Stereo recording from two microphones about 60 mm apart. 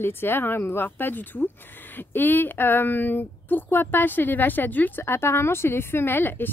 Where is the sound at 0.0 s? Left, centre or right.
Left.